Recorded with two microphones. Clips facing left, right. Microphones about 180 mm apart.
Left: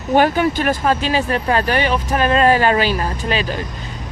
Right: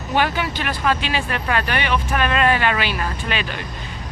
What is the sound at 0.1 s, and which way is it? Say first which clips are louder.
Speech: left 7 dB; 45° left (ahead or behind).